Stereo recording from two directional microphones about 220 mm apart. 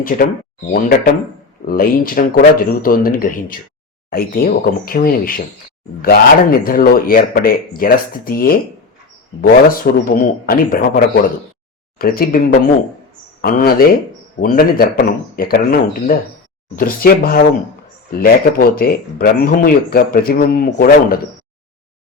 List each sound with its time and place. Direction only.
0.0 s speech: 40° left (ahead or behind)
9.9 s speech: 40° left (ahead or behind)
13.4 s speech: 40° left (ahead or behind)